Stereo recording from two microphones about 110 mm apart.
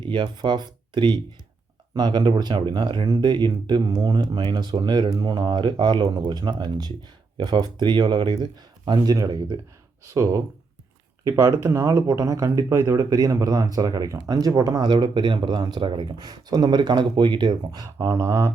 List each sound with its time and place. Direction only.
0.0 s speech: 45° right (ahead or behind)
18.2 s speech: 30° right (ahead or behind)